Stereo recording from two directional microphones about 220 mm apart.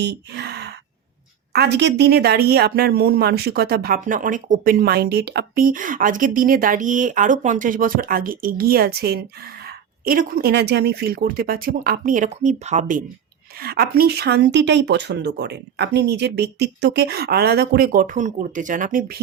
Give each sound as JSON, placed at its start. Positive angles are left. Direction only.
{"t": 0.0, "sound": "a sound", "side_deg": -50}
{"t": 1.5, "sound": "speech", "side_deg": -50}
{"t": 13.6, "sound": "speech", "side_deg": -45}